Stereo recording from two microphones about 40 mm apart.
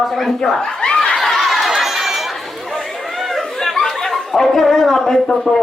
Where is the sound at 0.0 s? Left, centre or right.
Centre.